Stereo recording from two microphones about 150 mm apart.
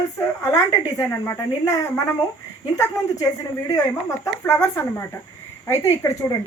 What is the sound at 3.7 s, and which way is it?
Speech, 20° left (ahead or behind).